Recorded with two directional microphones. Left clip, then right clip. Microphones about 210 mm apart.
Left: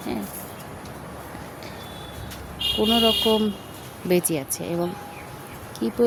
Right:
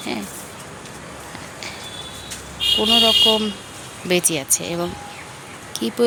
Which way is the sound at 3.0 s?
10° left (ahead or behind).